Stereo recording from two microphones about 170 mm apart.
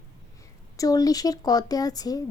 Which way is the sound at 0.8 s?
20° left (ahead or behind).